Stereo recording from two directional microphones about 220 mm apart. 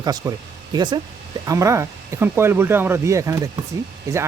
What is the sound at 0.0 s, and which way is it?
Speech, 15° right (ahead or behind).